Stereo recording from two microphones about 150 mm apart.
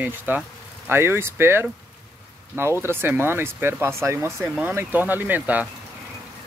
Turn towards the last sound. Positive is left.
turn(degrees=-10)  # may be behind; listen again after turning